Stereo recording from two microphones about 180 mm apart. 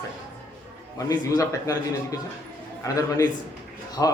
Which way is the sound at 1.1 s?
20° left (ahead or behind).